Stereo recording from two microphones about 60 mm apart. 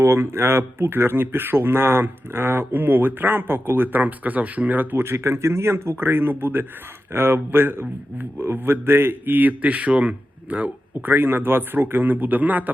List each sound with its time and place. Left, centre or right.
0.0 s speech: right